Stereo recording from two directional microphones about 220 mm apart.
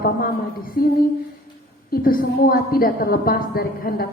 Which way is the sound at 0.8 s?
40° left (ahead or behind).